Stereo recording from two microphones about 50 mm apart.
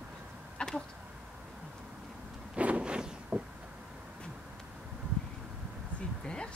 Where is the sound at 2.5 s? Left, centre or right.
Right.